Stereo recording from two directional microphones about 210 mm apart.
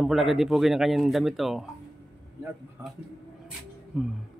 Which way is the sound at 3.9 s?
Centre (ahead or behind).